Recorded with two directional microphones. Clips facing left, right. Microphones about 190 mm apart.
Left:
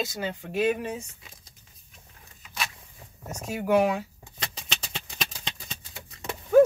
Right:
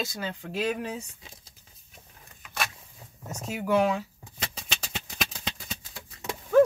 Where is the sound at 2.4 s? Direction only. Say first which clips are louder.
Right 2 dB; 55° right (ahead or behind).